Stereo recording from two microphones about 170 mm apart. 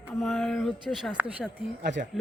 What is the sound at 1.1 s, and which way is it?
Speech, 10° right (ahead or behind).